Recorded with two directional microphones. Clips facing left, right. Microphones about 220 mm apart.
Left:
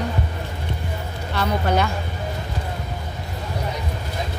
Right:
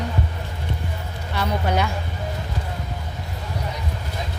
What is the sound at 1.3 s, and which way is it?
Speech, 10° right (ahead or behind).